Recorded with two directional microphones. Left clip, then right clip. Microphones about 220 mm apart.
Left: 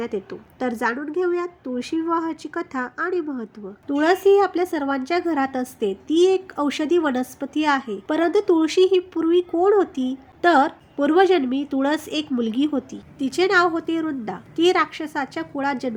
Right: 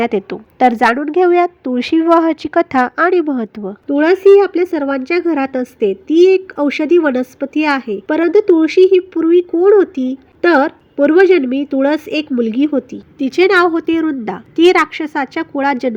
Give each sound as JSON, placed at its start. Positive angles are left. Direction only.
{"t": 0.0, "sound": "a woman's voice", "side_deg": -30}